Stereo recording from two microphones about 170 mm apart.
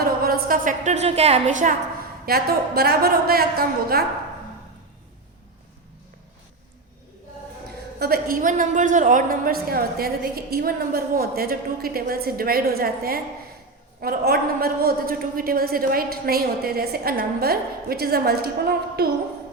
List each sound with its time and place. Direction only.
0.0 s a woman's voice: 60° right (ahead or behind); by 1.7 s 45° right (ahead or behind)
2.2 s a woman's voice: 65° right (ahead or behind)
7.9 s a woman's voice: 65° right (ahead or behind)